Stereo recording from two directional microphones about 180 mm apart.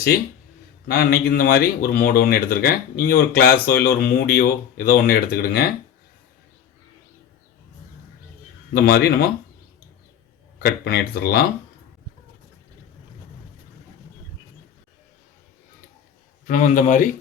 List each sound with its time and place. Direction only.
0.9 s speech: 60° left (ahead or behind)
8.7 s speech: 60° left (ahead or behind)
10.6 s speech: 60° left (ahead or behind)
16.5 s a man's voice: 45° left (ahead or behind)